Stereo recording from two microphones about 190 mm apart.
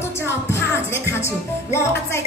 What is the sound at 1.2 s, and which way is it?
Speech, 15° left (ahead or behind).